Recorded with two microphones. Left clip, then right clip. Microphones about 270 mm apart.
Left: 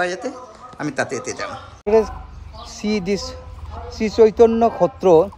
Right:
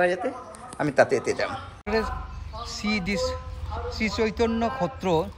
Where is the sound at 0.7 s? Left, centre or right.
Centre.